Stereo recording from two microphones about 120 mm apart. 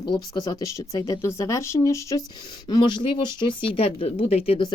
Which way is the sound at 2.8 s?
40° left (ahead or behind).